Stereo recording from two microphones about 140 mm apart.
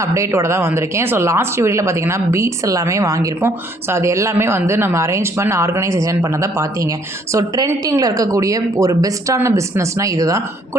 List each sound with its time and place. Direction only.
0.0 s speech: 20° right (ahead or behind)